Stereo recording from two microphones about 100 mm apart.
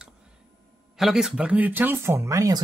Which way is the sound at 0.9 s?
5° right (ahead or behind).